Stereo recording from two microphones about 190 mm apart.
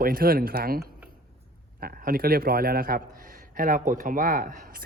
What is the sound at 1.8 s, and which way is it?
A man's voice, 50° right (ahead or behind).